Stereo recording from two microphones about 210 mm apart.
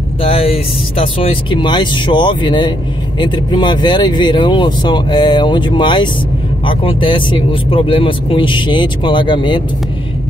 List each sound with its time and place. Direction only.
0.2 s speech: 30° left (ahead or behind)